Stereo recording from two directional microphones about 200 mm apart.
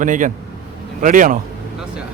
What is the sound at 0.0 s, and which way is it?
Speech, 40° right (ahead or behind).